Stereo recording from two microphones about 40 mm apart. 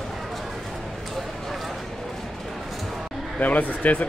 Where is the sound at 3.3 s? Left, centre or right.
Left.